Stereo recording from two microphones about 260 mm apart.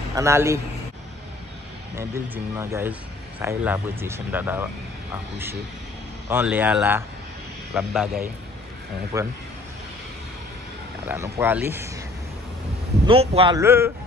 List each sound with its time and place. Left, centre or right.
0.1 s speech: centre
2.0 s speech: centre
6.2 s a man's voice: centre
9.1 s speech: centre
11.1 s speech: centre
13.0 s speech: right